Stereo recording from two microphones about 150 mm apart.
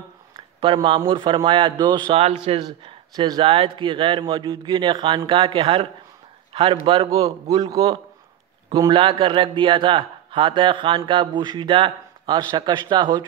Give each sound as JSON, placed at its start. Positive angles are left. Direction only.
{"t": 0.6, "sound": "a man's voice", "side_deg": -35}
{"t": 7.1, "sound": "a man's voice", "side_deg": -20}